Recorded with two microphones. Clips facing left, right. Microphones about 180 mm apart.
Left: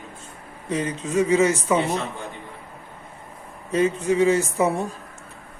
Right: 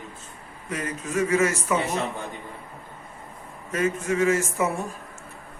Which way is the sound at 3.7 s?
35° left (ahead or behind).